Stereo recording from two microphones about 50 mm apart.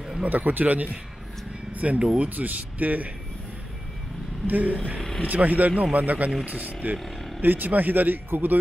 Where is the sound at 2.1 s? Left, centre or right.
Right.